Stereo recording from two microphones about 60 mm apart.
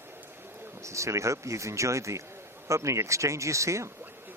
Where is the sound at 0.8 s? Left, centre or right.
Right.